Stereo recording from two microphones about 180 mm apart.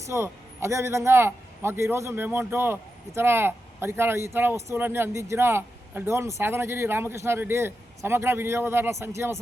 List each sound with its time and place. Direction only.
0.0 s speech: 15° right (ahead or behind)